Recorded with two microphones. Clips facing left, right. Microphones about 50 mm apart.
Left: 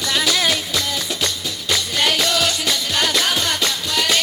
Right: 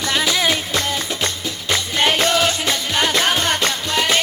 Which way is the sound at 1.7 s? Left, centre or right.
Right.